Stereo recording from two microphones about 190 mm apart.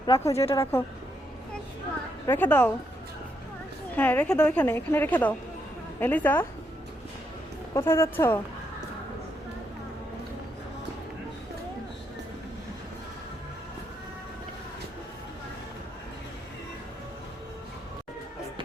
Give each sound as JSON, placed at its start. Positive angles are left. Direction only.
{"t": 0.0, "sound": "a woman's voice", "side_deg": 20}
{"t": 2.2, "sound": "a woman's voice", "side_deg": 10}
{"t": 3.9, "sound": "a woman's voice", "side_deg": 10}
{"t": 7.7, "sound": "a woman's voice", "side_deg": 15}